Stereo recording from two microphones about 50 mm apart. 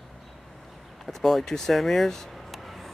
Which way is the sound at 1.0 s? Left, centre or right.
Centre.